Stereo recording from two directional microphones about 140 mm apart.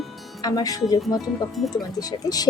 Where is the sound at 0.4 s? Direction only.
25° left (ahead or behind).